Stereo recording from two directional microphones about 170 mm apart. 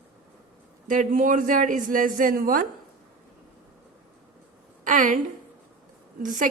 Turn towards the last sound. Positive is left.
turn(degrees=-50)  # may be behind; listen again after turning